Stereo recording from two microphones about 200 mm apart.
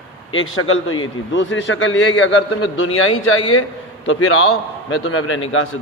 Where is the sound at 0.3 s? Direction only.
85° left.